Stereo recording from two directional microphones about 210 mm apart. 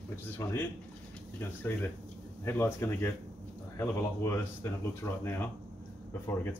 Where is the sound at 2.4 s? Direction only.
10° left (ahead or behind).